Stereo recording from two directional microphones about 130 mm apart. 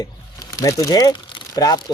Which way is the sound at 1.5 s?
30° left (ahead or behind).